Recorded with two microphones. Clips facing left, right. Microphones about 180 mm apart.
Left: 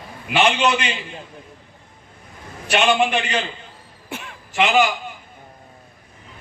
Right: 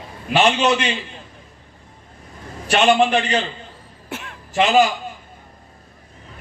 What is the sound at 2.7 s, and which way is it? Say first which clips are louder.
Speech: right 3 dB; 40° right (ahead or behind).